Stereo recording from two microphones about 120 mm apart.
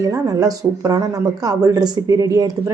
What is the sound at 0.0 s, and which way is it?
A woman's voice, 30° right (ahead or behind).